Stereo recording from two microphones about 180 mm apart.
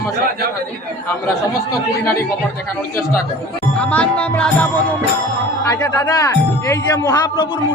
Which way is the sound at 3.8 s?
5° left (ahead or behind).